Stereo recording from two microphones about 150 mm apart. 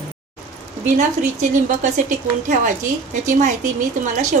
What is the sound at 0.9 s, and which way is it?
Speech, 55° right (ahead or behind).